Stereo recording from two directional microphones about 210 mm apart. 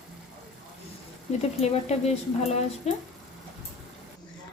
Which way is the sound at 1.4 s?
30° left (ahead or behind).